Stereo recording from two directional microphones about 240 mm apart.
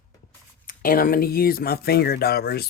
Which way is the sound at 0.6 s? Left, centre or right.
Left.